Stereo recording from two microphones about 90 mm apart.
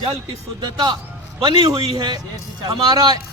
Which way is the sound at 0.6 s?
55° right (ahead or behind).